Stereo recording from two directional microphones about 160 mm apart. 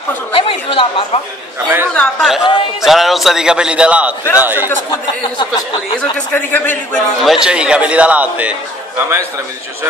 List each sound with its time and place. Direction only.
0.3 s chatter: 35° left (ahead or behind)
2.0 s a man's voice: centre (ahead or behind)
6.3 s a man's voice: 10° left (ahead or behind)
7.2 s a man's voice: 5° right (ahead or behind)